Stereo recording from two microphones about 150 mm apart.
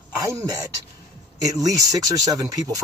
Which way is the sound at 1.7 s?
25° right (ahead or behind).